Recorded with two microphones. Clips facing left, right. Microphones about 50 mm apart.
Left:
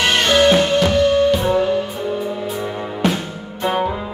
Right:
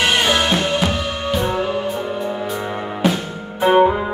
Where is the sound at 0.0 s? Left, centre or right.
Centre.